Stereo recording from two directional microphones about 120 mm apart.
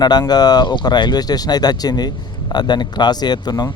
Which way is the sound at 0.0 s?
35° left (ahead or behind).